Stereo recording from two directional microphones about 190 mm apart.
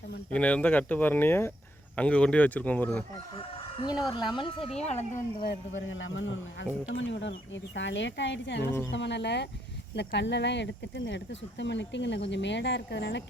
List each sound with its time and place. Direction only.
0.3 s speech: 5° left (ahead or behind)
3.3 s crowing: 25° left (ahead or behind)
4.1 s speech: 25° left (ahead or behind)
5.5 s a man's voice: 85° left; by 13.2 s 65° left (ahead or behind)